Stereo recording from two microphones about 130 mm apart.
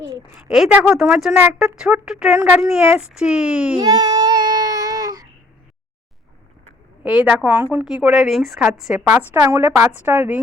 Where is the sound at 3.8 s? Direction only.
30° right (ahead or behind).